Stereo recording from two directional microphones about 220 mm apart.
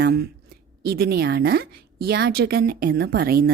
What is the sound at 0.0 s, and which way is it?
A woman's voice, 45° right (ahead or behind).